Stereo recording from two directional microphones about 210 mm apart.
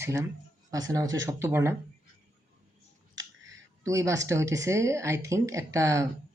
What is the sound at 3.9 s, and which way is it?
Speech, 15° right (ahead or behind).